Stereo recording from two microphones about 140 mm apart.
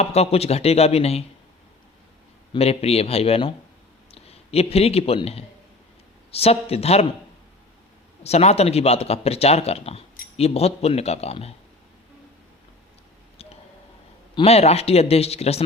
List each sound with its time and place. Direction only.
0.0 s speech: 50° left (ahead or behind)
2.5 s speech: 45° left (ahead or behind)
8.2 s speech: 50° left (ahead or behind)
13.4 s a sound: 45° left (ahead or behind)
14.3 s speech: 45° left (ahead or behind)